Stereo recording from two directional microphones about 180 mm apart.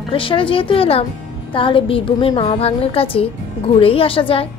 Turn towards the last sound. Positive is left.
turn(degrees=30)  # may be behind; listen again after turning